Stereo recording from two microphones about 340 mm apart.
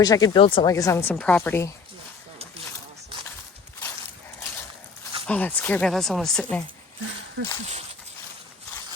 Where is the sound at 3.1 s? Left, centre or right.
Centre.